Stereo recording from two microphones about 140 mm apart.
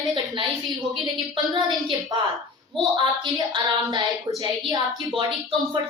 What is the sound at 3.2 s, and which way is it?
A woman's voice, 35° right (ahead or behind).